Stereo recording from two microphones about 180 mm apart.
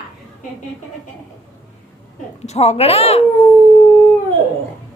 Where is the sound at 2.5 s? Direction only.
35° left (ahead or behind).